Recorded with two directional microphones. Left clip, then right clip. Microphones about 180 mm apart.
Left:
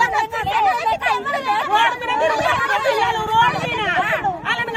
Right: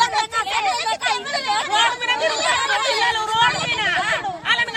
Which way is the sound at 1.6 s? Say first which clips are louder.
Left 1 dB; 5° right (ahead or behind).